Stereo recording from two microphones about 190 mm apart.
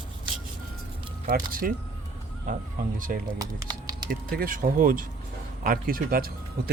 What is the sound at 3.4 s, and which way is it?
Speech, 20° right (ahead or behind).